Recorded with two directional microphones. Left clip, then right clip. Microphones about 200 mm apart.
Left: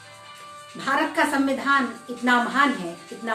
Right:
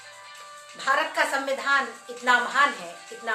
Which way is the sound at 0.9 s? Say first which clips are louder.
Left 1 dB; 15° right (ahead or behind).